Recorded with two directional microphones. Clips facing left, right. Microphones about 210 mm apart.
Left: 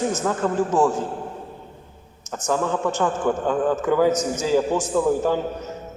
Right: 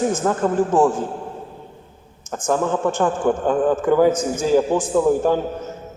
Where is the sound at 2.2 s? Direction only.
50° right (ahead or behind).